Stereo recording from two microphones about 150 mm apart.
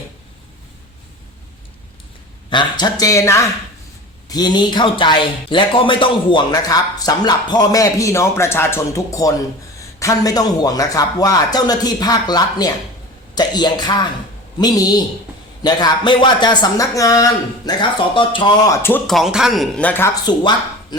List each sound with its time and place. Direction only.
2.5 s speech: 30° left (ahead or behind)
19.0 s speech: centre (ahead or behind)
20.3 s speech: 30° left (ahead or behind)